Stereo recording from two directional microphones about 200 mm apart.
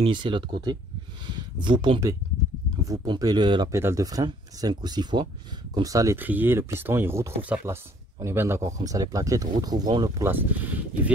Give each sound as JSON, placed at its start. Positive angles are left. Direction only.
{"t": 0.0, "sound": "speech", "side_deg": -25}